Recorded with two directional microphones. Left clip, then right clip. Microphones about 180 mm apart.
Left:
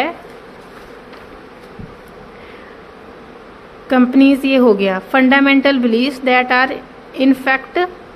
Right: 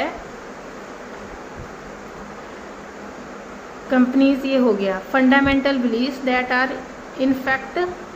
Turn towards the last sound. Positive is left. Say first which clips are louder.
# left 6 dB
turn(degrees=55)  # may be behind; listen again after turning